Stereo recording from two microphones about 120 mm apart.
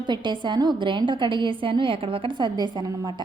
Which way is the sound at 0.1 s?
40° right (ahead or behind).